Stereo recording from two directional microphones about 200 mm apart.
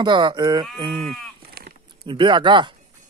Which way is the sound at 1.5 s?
50° right (ahead or behind).